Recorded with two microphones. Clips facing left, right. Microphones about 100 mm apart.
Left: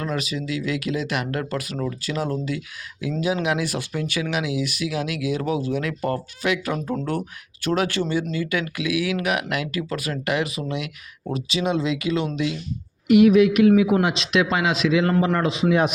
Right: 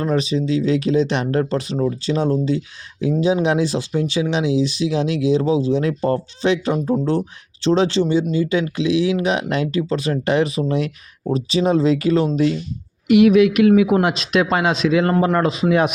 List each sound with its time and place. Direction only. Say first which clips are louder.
0.0 s speech: right 8 dB; 30° right (ahead or behind)
13.1 s speech: right 2 dB; 85° right; by 15.6 s 40° right (ahead or behind)